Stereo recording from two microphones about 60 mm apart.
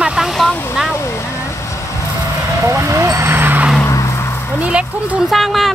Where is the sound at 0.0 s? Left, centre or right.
Centre.